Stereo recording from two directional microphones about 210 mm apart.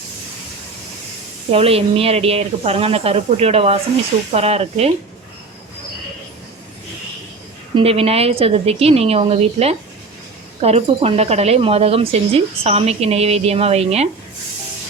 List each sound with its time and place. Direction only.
1.5 s speech: 30° right (ahead or behind)
7.8 s speech: 30° right (ahead or behind)